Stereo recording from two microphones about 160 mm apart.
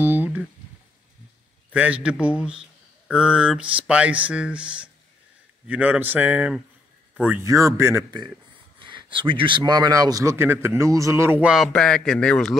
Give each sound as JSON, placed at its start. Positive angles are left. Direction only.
{"t": 0.0, "sound": "a sound", "side_deg": -10}
{"t": 1.7, "sound": "a man's voice", "side_deg": -10}
{"t": 11.4, "sound": "a man's voice", "side_deg": 0}